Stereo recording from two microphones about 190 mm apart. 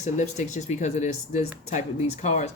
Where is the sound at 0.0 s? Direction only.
40° left (ahead or behind).